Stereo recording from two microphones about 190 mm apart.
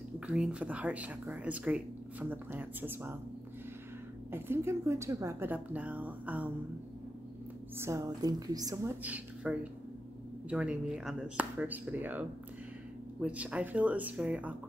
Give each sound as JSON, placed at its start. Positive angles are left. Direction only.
{"t": 0.3, "sound": "speech", "side_deg": -5}
{"t": 4.3, "sound": "speech", "side_deg": -15}
{"t": 7.7, "sound": "a woman's voice", "side_deg": -15}
{"t": 9.0, "sound": "speech", "side_deg": -10}